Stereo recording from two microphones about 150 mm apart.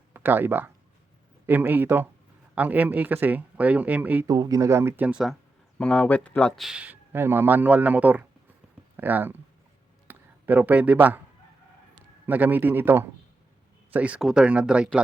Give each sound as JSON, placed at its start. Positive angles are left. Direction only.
{"t": 0.1, "sound": "speech", "side_deg": -15}
{"t": 4.3, "sound": "speech", "side_deg": -25}
{"t": 5.8, "sound": "speech", "side_deg": 5}
{"t": 12.2, "sound": "speech", "side_deg": -10}